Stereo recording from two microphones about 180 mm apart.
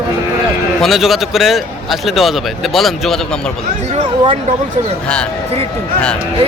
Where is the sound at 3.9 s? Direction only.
35° right (ahead or behind).